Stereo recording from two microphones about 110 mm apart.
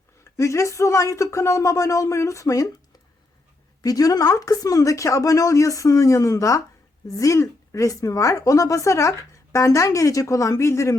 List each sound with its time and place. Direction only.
0.3 s speech: 25° left (ahead or behind)
3.8 s speech: 35° left (ahead or behind)